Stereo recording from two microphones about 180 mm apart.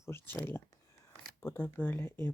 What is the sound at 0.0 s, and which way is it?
Speech, 15° left (ahead or behind).